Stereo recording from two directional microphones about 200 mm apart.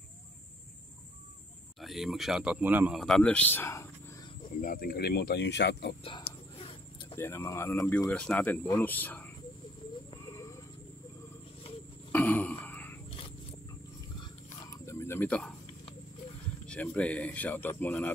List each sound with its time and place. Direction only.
1.8 s speech: centre (ahead or behind)
3.0 s speech: 5° left (ahead or behind)
4.6 s speech: 45° left (ahead or behind)
6.0 s whispering: 30° left (ahead or behind)
7.2 s speech: 15° left (ahead or behind)
10.1 s a sound: 15° left (ahead or behind)
12.1 s throat clearing: 10° left (ahead or behind)
14.9 s a sound: 15° left (ahead or behind)
16.6 s speech: 5° left (ahead or behind)